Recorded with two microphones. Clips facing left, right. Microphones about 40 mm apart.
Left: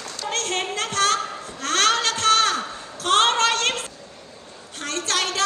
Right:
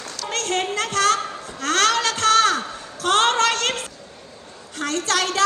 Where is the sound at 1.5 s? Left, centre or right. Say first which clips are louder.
Right 1 dB; right.